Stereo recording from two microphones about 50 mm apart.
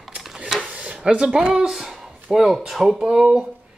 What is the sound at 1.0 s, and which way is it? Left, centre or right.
Speech, centre.